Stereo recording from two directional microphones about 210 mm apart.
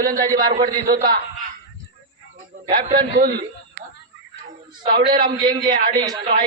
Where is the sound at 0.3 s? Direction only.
20° right (ahead or behind).